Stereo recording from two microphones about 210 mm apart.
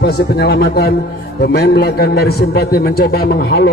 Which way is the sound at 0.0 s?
50° left (ahead or behind).